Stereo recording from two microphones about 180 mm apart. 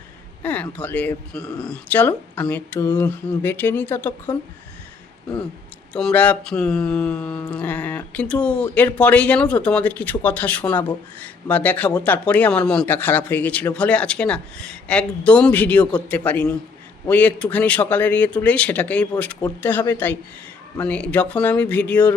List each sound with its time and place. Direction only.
0.4 s speech: 10° left (ahead or behind)
5.9 s speech: 5° left (ahead or behind)